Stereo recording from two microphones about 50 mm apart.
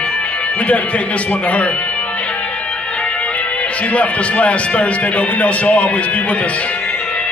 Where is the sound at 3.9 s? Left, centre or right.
Left.